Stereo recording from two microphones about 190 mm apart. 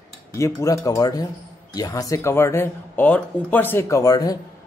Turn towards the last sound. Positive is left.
turn(degrees=20)  # may be behind; listen again after turning